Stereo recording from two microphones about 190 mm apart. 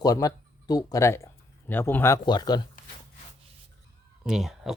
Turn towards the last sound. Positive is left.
turn(degrees=0)  # may be behind; listen again after turning